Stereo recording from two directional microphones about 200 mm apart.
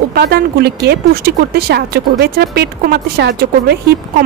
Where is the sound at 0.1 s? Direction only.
50° right (ahead or behind).